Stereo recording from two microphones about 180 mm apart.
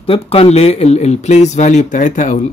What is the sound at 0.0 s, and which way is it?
Speech, 30° left (ahead or behind).